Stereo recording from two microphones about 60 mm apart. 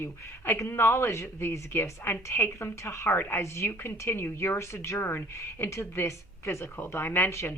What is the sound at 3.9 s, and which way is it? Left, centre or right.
A woman's voice, left.